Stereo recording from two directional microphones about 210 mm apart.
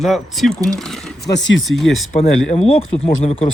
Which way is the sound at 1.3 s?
60° left (ahead or behind).